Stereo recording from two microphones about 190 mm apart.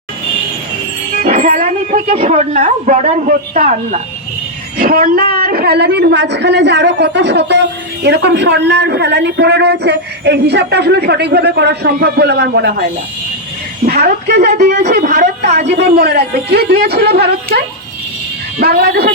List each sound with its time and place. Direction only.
1.2 s a man's voice: 45° right (ahead or behind); by 12.7 s 60° right (ahead or behind)
13.8 s speech: 55° right (ahead or behind)
14.8 s speech: 40° right (ahead or behind)
15.5 s a man's voice: 60° right (ahead or behind)
18.6 s speech: 55° right (ahead or behind)